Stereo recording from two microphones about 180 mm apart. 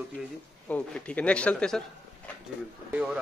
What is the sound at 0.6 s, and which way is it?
Speech, 5° left (ahead or behind).